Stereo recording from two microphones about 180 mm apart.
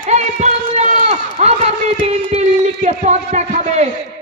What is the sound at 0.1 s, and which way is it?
Speech, 40° right (ahead or behind).